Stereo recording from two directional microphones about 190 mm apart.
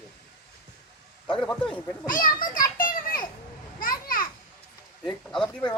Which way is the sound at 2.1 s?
45° left (ahead or behind).